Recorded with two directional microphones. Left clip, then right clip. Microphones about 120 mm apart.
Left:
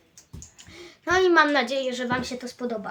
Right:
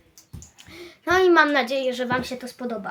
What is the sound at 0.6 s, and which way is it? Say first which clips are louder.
A woman's voice: right 3 dB; 30° right (ahead or behind).